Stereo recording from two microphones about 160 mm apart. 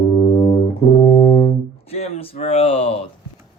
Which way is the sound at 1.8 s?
40° left (ahead or behind).